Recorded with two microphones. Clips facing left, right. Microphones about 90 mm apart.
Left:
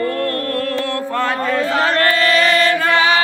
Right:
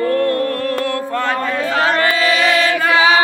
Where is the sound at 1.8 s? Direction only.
10° right (ahead or behind).